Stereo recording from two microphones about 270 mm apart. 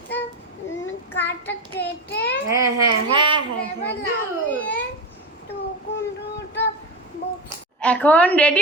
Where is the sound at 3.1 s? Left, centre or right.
Centre.